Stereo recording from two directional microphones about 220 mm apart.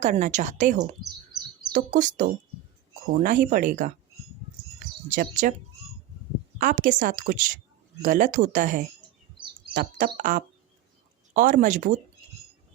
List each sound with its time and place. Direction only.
0.0 s a woman's voice: 35° right (ahead or behind)
5.0 s a woman's voice: 35° right (ahead or behind)
6.6 s a woman's voice: 35° right (ahead or behind)